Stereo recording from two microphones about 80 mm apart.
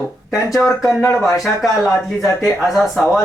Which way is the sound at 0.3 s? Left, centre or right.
Centre.